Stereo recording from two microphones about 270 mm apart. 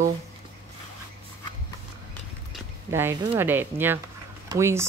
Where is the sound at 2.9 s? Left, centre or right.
Centre.